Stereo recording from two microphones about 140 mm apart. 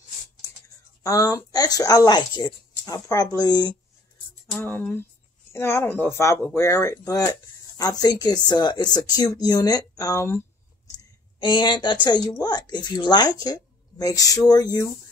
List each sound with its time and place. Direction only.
1.0 s speech: 25° left (ahead or behind)
4.6 s speech: 15° left (ahead or behind)
11.3 s speech: 35° left (ahead or behind)